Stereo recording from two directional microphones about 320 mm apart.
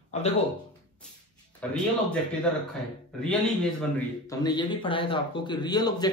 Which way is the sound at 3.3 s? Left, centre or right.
Centre.